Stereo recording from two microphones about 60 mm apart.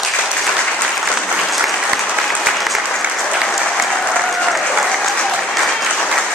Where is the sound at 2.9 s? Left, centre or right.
Centre.